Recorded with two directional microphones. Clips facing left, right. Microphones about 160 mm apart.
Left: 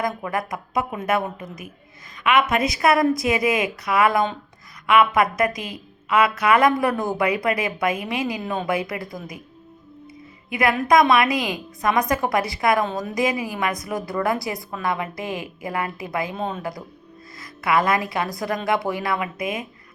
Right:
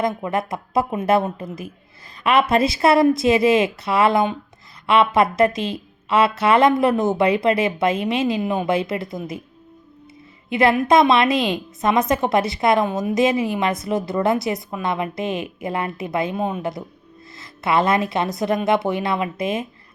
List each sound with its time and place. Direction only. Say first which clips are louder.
0.0 s a woman's voice: right 3 dB; 25° right (ahead or behind)
10.5 s a woman's voice: right 3 dB; 25° right (ahead or behind)
16.3 s a woman's voice: right 4 dB; 10° right (ahead or behind)
17.3 s a woman's voice: right 1 dB; 25° right (ahead or behind)